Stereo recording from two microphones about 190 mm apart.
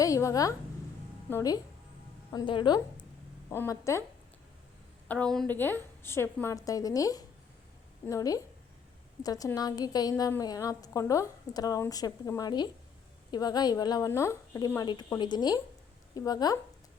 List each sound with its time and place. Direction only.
0.0 s a sound: 15° left (ahead or behind)
1.3 s a woman's voice: 15° left (ahead or behind)
5.0 s a woman's voice: 5° left (ahead or behind)